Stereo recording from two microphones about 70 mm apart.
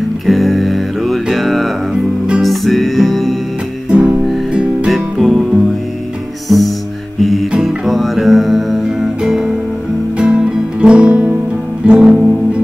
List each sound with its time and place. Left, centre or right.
0.3 s music: centre
3.9 s music: centre
4.6 s music: centre
7.2 s music: centre